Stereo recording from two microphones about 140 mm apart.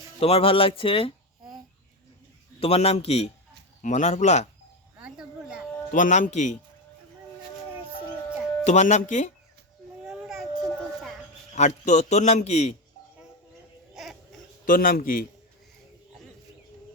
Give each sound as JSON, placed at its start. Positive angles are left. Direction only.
{"t": 0.2, "sound": "speech", "side_deg": 45}
{"t": 2.6, "sound": "a man's voice", "side_deg": 45}
{"t": 3.8, "sound": "a man's voice", "side_deg": 60}
{"t": 4.9, "sound": "speech", "side_deg": -10}
{"t": 5.9, "sound": "a man's voice", "side_deg": 60}
{"t": 8.6, "sound": "a man's voice", "side_deg": 55}
{"t": 10.1, "sound": "baby cry", "side_deg": -5}
{"t": 11.5, "sound": "a man's voice", "side_deg": 60}
{"t": 13.9, "sound": "baby cry", "side_deg": 0}
{"t": 14.6, "sound": "a man's voice", "side_deg": 85}